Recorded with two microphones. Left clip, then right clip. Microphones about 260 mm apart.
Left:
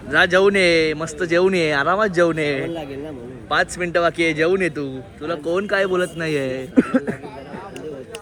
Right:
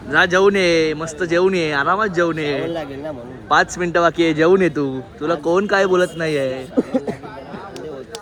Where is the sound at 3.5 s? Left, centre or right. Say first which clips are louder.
Right 4 dB; centre.